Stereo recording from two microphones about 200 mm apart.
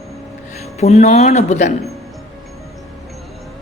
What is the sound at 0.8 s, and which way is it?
Speech, 35° left (ahead or behind).